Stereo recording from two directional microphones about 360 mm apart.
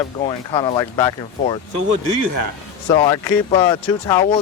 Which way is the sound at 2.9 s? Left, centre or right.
Centre.